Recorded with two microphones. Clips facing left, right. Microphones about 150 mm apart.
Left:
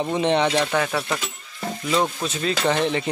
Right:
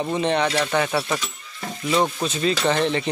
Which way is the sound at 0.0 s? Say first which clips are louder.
Left 1 dB; 20° left (ahead or behind).